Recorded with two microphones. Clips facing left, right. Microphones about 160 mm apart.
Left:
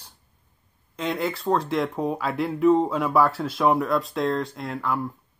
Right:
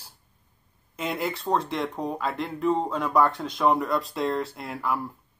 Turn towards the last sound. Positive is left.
turn(degrees=0)  # may be behind; listen again after turning